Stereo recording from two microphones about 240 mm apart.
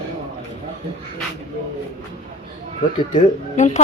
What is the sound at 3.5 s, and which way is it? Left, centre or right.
Speech, left.